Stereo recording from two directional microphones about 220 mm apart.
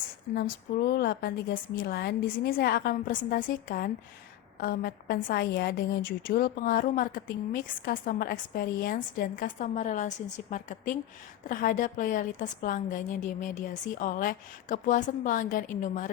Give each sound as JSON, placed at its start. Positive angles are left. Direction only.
{"t": 0.8, "sound": "a woman's voice", "side_deg": 45}